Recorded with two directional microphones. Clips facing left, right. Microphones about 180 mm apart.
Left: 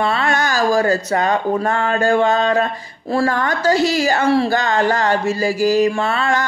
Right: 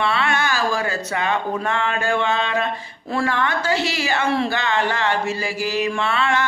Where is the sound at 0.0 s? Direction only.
40° left (ahead or behind).